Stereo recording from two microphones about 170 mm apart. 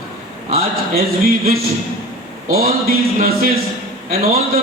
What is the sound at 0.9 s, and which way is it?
Speech, 60° right (ahead or behind).